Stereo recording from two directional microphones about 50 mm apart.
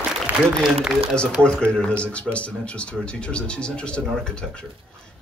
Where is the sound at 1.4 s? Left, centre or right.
Centre.